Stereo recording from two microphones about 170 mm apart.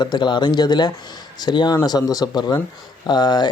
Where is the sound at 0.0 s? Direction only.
25° left (ahead or behind).